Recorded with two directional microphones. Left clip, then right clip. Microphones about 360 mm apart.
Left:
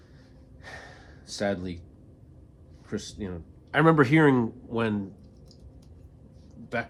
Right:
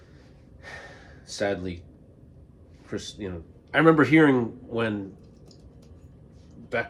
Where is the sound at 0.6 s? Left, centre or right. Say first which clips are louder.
Right 2 dB; centre.